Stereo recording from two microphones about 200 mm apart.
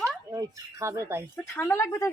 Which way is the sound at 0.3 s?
15° right (ahead or behind).